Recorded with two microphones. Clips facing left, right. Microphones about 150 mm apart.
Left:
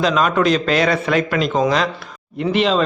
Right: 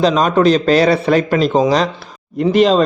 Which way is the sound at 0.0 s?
35° right (ahead or behind).